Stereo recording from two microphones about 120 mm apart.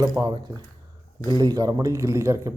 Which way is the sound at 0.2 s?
35° right (ahead or behind).